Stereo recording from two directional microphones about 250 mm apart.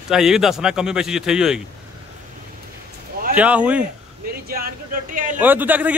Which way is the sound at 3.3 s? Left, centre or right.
Centre.